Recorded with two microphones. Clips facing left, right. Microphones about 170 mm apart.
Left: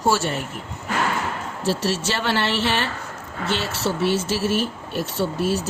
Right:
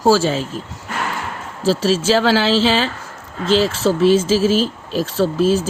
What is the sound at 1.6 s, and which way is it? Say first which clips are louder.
Speech: right 7 dB; 90° right.